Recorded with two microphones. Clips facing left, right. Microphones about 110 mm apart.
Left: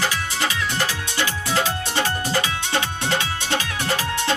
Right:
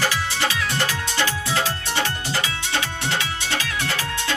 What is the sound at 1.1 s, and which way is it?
Music, 20° left (ahead or behind).